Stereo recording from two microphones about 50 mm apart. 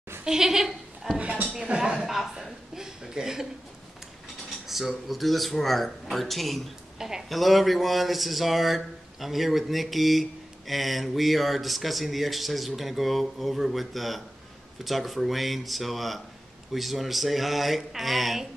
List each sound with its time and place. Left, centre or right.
0.2 s goat: centre
1.1 s a sound: right
1.6 s chuckle: centre
4.6 s speech: centre